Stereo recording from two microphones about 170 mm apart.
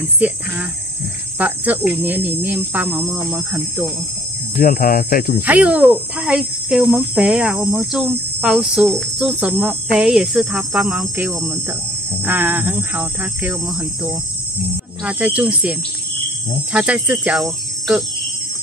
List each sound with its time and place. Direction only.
0.2 s speech: 10° right (ahead or behind)
1.4 s speech: 10° right (ahead or behind)
4.6 s speech: 55° left (ahead or behind)
5.4 s speech: 10° right (ahead or behind)
15.0 s speech: 10° right (ahead or behind)